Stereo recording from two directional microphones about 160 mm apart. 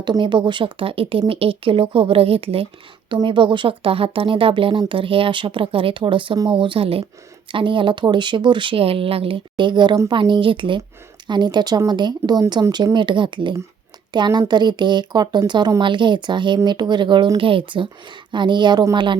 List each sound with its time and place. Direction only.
0.0 s a woman's voice: 30° right (ahead or behind)